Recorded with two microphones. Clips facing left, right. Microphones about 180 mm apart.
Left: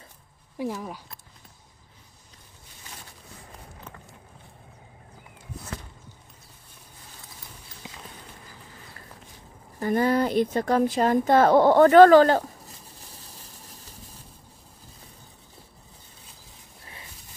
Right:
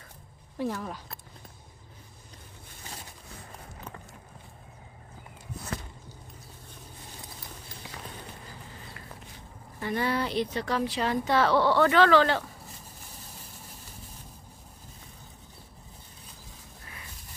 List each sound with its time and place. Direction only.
0.6 s speech: 10° left (ahead or behind)
7.8 s clip-clop: 20° left (ahead or behind)
9.8 s speech: 45° left (ahead or behind)